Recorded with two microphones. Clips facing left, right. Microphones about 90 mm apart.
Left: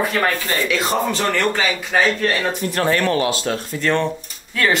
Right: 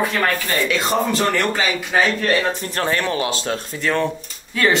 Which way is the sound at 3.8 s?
Centre (ahead or behind).